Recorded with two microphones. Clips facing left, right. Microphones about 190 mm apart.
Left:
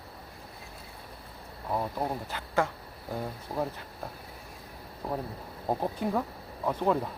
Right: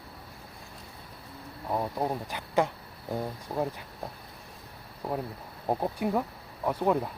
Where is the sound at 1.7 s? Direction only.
10° right (ahead or behind).